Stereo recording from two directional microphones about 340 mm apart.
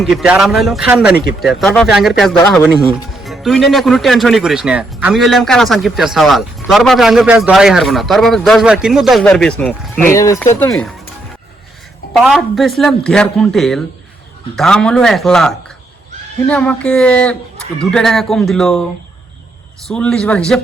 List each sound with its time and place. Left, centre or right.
0.0 s speech: centre
1.1 s speech: left
1.4 s speech: centre
12.1 s speech: centre
19.9 s speech: centre